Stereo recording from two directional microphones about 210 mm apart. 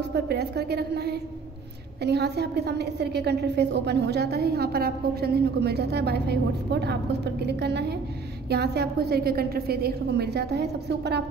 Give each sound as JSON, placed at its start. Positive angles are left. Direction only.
{"t": 0.1, "sound": "a woman's voice", "side_deg": -50}